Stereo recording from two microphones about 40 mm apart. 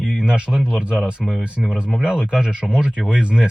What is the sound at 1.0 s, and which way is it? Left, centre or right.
Speech, centre.